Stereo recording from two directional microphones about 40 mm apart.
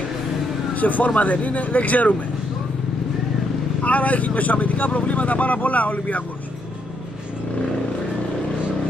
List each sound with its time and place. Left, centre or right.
0.7 s speech: left
3.8 s speech: left